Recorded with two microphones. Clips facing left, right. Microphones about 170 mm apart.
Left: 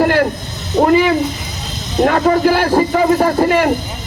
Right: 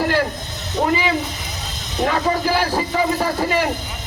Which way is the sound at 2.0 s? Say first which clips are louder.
Left 7 dB; 55° left (ahead or behind).